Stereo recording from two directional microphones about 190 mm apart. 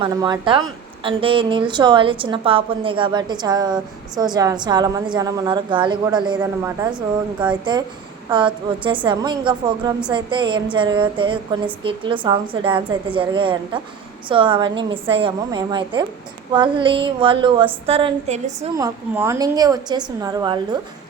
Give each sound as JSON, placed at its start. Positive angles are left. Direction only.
{"t": 0.0, "sound": "a woman's voice", "side_deg": -25}
{"t": 18.8, "sound": "a woman's voice", "side_deg": -15}